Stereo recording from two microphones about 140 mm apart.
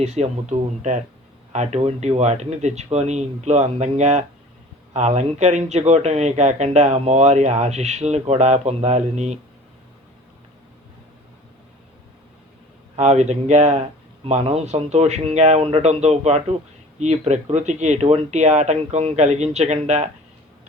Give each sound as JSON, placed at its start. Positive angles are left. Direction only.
{"t": 0.0, "sound": "speech", "side_deg": -50}
{"t": 13.0, "sound": "speech", "side_deg": -55}